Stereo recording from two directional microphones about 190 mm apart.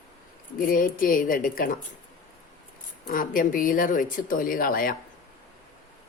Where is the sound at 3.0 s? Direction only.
45° left (ahead or behind).